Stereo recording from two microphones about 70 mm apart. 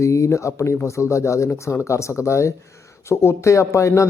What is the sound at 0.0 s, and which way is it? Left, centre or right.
A man's voice, left.